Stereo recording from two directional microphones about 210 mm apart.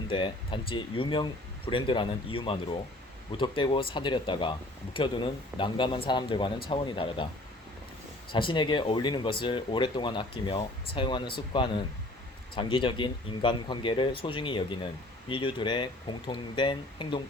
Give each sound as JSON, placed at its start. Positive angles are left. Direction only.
{"t": 0.1, "sound": "speech", "side_deg": 25}
{"t": 8.3, "sound": "speech", "side_deg": 25}